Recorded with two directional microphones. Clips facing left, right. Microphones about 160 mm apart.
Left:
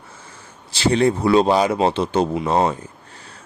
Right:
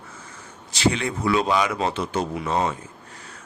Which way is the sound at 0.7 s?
30° left (ahead or behind).